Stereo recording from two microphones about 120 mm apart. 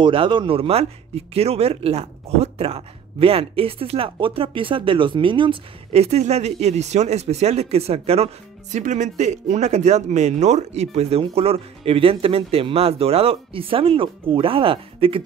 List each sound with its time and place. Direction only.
0.0 s speech: 45° right (ahead or behind)
6.0 s speech: 65° right (ahead or behind)
8.7 s speech: 85° right; by 15.2 s 50° right (ahead or behind)